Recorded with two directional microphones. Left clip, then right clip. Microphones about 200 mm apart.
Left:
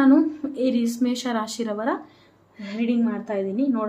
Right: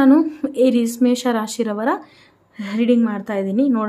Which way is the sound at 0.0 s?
40° right (ahead or behind).